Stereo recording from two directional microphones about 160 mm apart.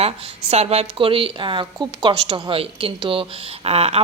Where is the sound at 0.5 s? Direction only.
40° right (ahead or behind).